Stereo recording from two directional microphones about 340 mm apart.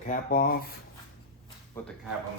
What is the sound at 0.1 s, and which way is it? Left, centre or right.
Speech, left.